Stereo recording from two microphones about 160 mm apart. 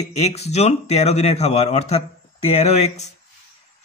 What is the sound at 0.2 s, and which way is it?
A man's voice, 40° left (ahead or behind).